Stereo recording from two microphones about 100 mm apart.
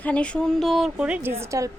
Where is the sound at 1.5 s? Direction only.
35° right (ahead or behind).